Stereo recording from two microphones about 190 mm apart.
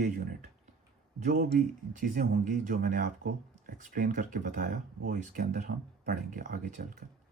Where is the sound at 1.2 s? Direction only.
50° right (ahead or behind).